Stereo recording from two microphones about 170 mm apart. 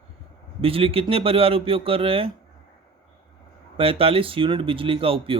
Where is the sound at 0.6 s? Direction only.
35° right (ahead or behind).